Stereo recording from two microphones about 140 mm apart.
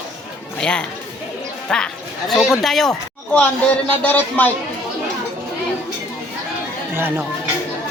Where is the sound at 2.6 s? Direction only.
Centre (ahead or behind).